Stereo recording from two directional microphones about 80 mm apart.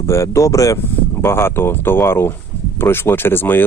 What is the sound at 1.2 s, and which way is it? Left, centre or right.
Speech, left.